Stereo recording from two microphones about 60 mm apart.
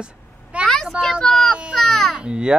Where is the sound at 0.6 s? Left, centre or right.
Centre.